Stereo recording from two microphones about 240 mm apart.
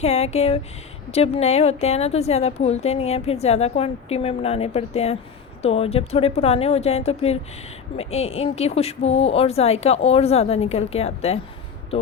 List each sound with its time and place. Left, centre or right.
0.0 s a woman's voice: left